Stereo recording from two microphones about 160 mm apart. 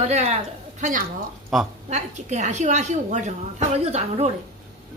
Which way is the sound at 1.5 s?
Centre (ahead or behind).